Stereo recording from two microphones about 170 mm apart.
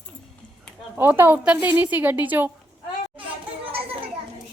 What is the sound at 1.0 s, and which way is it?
A woman's voice, 10° right (ahead or behind).